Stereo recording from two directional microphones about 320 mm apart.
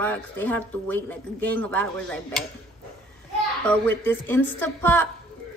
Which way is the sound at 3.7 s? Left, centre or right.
Centre.